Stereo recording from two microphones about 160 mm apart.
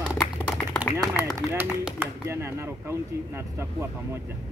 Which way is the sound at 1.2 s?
10° right (ahead or behind).